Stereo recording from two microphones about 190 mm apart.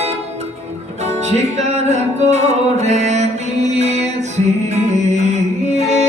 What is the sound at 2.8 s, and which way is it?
Mantra, 35° right (ahead or behind).